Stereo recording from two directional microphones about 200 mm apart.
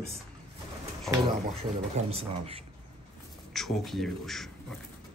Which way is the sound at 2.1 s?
25° right (ahead or behind).